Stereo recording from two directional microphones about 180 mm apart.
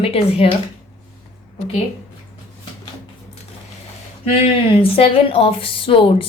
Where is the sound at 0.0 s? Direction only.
35° left (ahead or behind).